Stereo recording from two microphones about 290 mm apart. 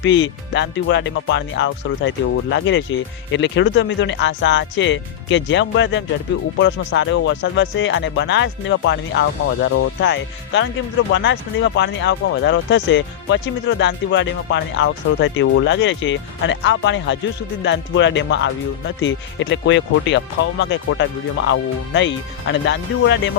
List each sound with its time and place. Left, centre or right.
0.0 s speech: left